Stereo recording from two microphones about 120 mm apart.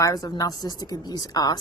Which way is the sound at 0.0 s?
30° left (ahead or behind).